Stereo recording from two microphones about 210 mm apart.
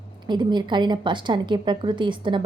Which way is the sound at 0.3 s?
20° right (ahead or behind).